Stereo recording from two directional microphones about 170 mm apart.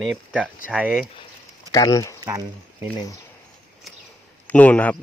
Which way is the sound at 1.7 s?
20° left (ahead or behind).